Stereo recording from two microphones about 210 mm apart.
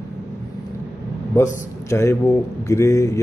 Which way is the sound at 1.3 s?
15° left (ahead or behind).